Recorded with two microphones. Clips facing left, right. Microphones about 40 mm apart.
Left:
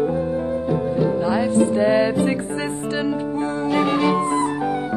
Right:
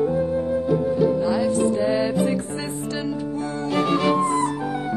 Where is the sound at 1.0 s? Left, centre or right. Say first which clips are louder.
Even; left.